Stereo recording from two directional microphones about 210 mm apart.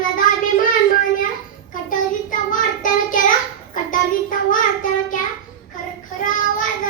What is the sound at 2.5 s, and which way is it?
Child singing, 40° left (ahead or behind).